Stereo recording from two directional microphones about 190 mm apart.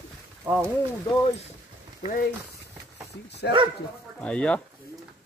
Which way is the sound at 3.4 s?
60° left (ahead or behind).